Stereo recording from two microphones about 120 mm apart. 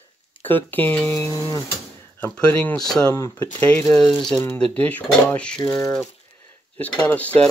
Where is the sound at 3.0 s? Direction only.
25° left (ahead or behind).